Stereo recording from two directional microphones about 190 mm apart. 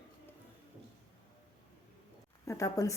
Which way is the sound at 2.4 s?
15° left (ahead or behind).